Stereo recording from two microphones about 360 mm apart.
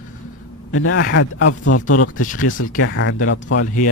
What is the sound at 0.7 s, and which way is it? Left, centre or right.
A man's voice, left.